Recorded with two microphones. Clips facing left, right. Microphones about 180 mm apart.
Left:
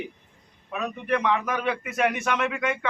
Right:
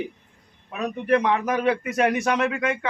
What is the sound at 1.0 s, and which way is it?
A man's voice, 35° right (ahead or behind).